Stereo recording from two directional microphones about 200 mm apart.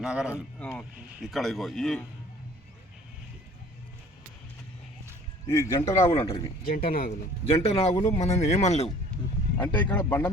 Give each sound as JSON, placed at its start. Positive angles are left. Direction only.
{"t": 0.0, "sound": "speech", "side_deg": -5}
{"t": 0.6, "sound": "speech", "side_deg": 10}
{"t": 5.5, "sound": "speech", "side_deg": 15}
{"t": 6.7, "sound": "speech", "side_deg": 45}
{"t": 7.8, "sound": "speech", "side_deg": 30}
{"t": 9.6, "sound": "speech", "side_deg": 10}